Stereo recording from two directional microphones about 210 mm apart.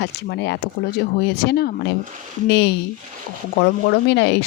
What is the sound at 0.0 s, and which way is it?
Speech, 55° left (ahead or behind).